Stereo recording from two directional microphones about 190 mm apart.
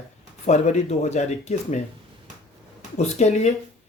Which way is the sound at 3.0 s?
35° left (ahead or behind).